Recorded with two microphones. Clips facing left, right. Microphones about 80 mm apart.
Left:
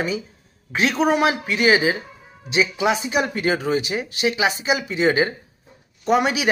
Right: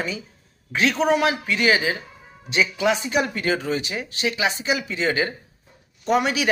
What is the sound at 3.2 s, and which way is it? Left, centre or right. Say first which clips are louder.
Speech: left 2 dB; left.